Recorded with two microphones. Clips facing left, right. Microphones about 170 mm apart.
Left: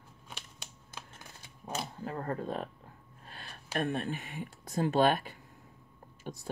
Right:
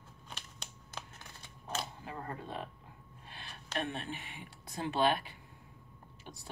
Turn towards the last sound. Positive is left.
turn(degrees=45)  # may be behind; listen again after turning